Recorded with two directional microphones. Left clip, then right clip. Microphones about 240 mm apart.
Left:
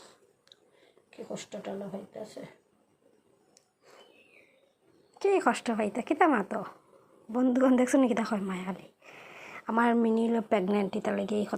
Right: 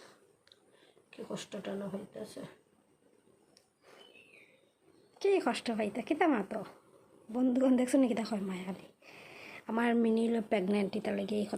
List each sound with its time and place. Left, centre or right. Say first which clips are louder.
1.1 s speech: left 2 dB; right
3.9 s a sound: left 2 dB; centre
5.2 s a woman's voice: left 4 dB; centre